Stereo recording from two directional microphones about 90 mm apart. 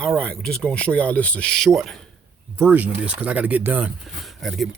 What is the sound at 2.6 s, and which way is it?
Speech, 20° right (ahead or behind).